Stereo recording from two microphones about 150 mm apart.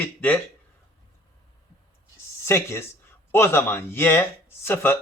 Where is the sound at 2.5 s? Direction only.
15° left (ahead or behind).